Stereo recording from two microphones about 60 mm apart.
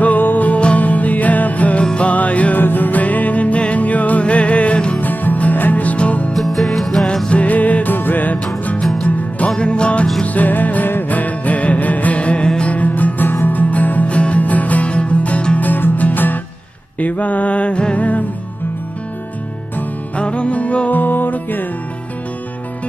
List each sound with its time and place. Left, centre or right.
0.0 s music: left
5.0 s music: left
6.3 s music: centre
7.2 s music: left
9.6 s music: centre
20.2 s music: centre